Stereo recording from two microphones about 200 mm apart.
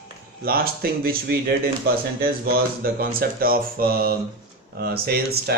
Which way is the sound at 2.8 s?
50° right (ahead or behind).